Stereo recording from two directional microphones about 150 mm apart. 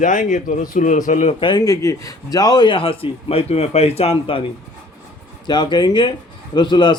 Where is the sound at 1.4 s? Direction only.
30° left (ahead or behind).